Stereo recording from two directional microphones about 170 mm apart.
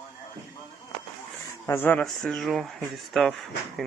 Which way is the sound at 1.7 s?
10° left (ahead or behind).